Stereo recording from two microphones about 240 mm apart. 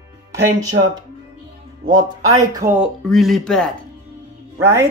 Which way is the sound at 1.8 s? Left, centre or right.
Right.